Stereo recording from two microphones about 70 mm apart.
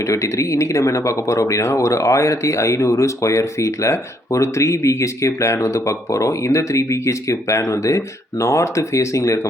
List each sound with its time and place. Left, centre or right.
0.0 s speech: left